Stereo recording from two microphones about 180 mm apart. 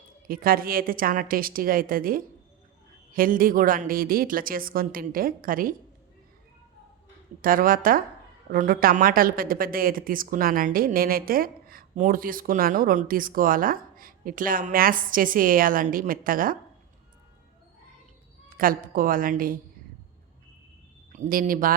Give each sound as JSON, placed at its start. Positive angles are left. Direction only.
{"t": 0.3, "sound": "a woman's voice", "side_deg": -55}
{"t": 7.4, "sound": "a woman's voice", "side_deg": -50}
{"t": 18.4, "sound": "a woman's voice", "side_deg": -50}
{"t": 21.1, "sound": "a woman's voice", "side_deg": -45}